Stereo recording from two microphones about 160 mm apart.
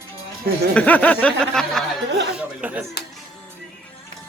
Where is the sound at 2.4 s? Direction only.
10° right (ahead or behind).